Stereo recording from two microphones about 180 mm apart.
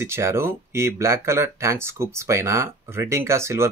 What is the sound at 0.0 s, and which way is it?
Speech, 15° right (ahead or behind).